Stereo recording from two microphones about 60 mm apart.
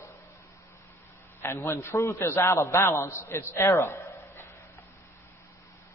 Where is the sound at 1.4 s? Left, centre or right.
Left.